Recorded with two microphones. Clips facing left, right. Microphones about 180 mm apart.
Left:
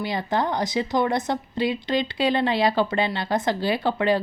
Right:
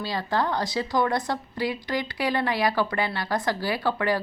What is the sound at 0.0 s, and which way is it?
A woman's voice, 20° left (ahead or behind).